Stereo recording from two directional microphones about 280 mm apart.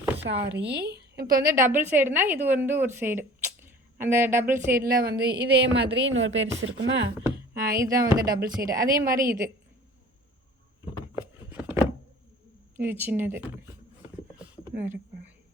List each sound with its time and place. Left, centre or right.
0.2 s a woman's voice: right
1.5 s a woman's voice: centre
4.7 s a woman's voice: right
11.4 s a sound: centre
12.7 s a woman's voice: centre